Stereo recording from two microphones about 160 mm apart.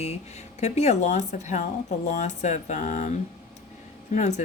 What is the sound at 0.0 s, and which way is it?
Speech, 40° left (ahead or behind).